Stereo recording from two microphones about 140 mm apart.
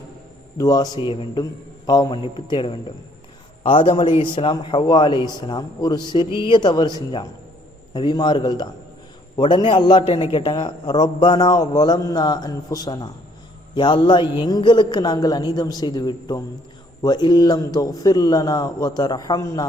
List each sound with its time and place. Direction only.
0.6 s a man's voice: 30° left (ahead or behind)
7.9 s a man's voice: 30° left (ahead or behind)